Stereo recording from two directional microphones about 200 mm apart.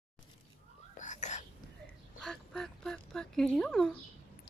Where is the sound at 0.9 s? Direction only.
35° left (ahead or behind).